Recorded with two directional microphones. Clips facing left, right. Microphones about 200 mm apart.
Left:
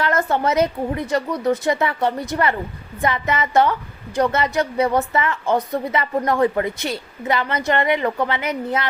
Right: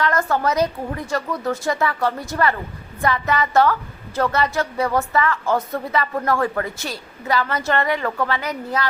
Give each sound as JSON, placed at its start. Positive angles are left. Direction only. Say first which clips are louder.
{"t": 0.0, "sound": "a woman's voice", "louder": "left 1 dB", "side_deg": 25}